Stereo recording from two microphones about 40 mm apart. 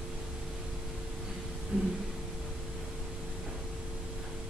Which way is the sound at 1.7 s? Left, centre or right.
Right.